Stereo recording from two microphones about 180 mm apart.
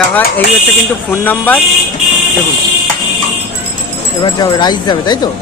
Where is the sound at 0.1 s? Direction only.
10° left (ahead or behind).